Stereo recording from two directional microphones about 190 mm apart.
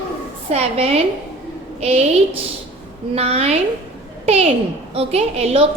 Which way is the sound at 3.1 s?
35° right (ahead or behind).